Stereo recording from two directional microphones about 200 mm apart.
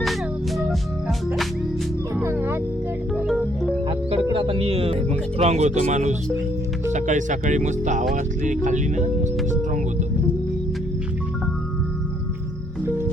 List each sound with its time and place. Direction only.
0.0 s organ: centre (ahead or behind)
2.2 s music: 10° right (ahead or behind)
3.8 s music: 25° right (ahead or behind)
5.4 s speech: 35° right (ahead or behind)